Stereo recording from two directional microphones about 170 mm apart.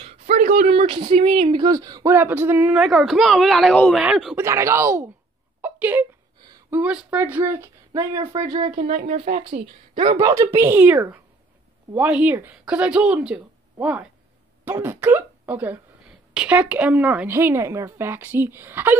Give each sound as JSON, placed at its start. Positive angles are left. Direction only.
{"t": 0.4, "sound": "a sound", "side_deg": -50}
{"t": 0.7, "sound": "speech", "side_deg": -35}
{"t": 4.4, "sound": "speech", "side_deg": -15}
{"t": 5.6, "sound": "a sound", "side_deg": -10}
{"t": 6.7, "sound": "speech", "side_deg": -5}
{"t": 8.7, "sound": "speech", "side_deg": -40}
{"t": 10.1, "sound": "speech", "side_deg": -20}